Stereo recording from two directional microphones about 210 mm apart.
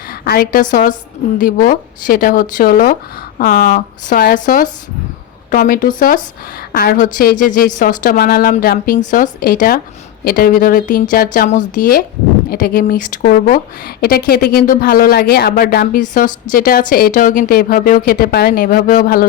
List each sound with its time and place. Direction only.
0.1 s a woman's voice: 45° left (ahead or behind)